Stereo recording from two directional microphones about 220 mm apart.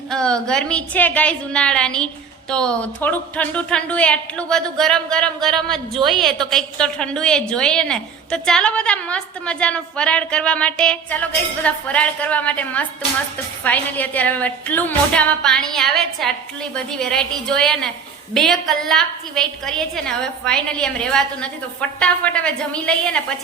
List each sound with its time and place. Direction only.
0.1 s a woman's voice: 5° left (ahead or behind)